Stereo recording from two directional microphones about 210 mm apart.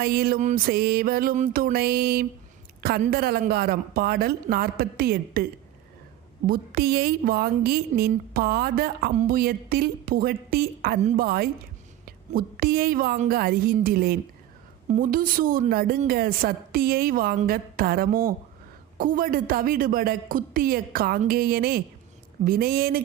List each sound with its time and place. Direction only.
0.0 s speech: 45° right (ahead or behind)
6.5 s a woman's voice: 45° right (ahead or behind)